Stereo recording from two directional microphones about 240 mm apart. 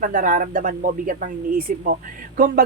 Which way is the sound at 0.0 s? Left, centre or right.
Right.